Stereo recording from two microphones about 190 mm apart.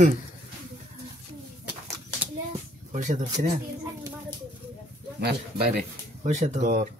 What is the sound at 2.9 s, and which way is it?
Speech, 40° right (ahead or behind).